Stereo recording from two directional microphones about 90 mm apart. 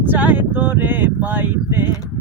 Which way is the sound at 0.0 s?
20° right (ahead or behind).